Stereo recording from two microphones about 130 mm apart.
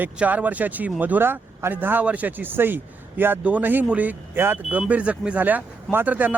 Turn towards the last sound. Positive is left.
turn(degrees=-15)  # may be behind; listen again after turning